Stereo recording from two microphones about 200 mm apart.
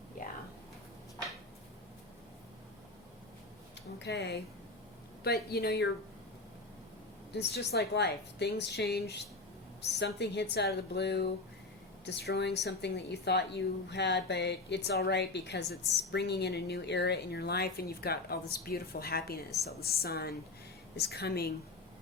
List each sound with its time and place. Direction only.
3.9 s a woman's voice: 60° left (ahead or behind)
7.3 s a woman's voice: 55° left (ahead or behind)